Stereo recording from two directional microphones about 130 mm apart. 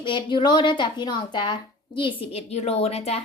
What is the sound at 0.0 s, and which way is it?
A woman's voice, 40° left (ahead or behind).